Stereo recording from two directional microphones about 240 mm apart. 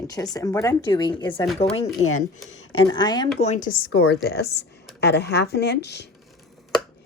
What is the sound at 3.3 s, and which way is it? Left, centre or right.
Speech, left.